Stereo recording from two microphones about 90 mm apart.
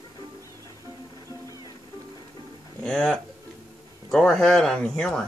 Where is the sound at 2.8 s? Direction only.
10° left (ahead or behind).